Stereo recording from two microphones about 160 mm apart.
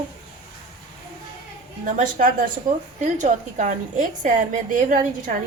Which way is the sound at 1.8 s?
55° right (ahead or behind).